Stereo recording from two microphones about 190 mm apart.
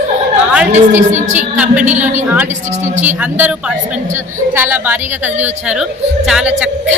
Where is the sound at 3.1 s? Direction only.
10° right (ahead or behind).